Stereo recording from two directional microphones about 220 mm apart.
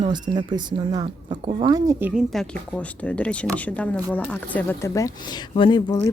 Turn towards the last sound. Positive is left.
turn(degrees=15)  # may be behind; listen again after turning